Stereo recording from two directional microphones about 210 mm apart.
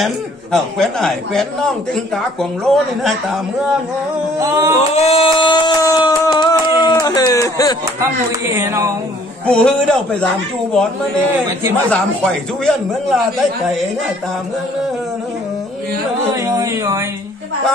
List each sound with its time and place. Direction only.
0.0 s a man's voice: centre (ahead or behind)
4.4 s speech: 15° right (ahead or behind)
4.7 s a sound: 30° left (ahead or behind)
8.5 s speech: 15° right (ahead or behind)
9.5 s a man's voice: 5° left (ahead or behind)
11.9 s a man's voice: 5° left (ahead or behind)
16.4 s speech: 15° right (ahead or behind)